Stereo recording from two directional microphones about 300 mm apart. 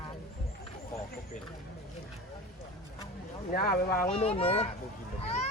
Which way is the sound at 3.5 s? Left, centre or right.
Left.